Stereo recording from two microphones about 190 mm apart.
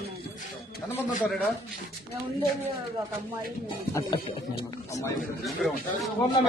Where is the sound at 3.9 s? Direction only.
20° left (ahead or behind).